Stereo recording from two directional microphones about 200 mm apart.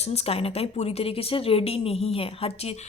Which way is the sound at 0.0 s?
30° left (ahead or behind).